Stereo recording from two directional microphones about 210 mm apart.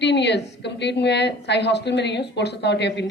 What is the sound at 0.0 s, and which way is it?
A woman's voice, 55° left (ahead or behind).